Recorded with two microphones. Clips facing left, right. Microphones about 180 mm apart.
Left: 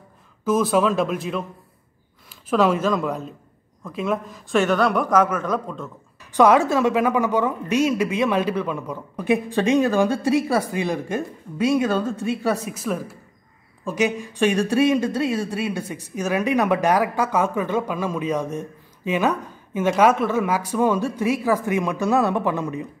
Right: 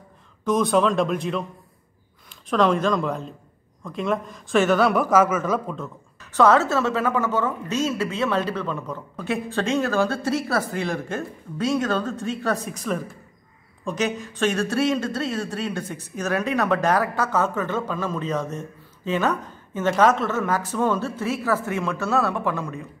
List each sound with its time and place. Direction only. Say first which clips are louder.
0.5 s speech: left 1 dB; 5° left (ahead or behind)
2.5 s speech: left 1 dB; 5° left (ahead or behind)
6.3 s a man's voice: left 2 dB; 15° left (ahead or behind)